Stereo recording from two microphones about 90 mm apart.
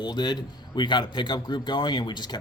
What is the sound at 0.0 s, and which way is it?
A man's voice, 55° left (ahead or behind).